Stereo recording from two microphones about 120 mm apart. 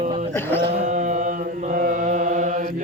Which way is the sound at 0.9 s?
90° right.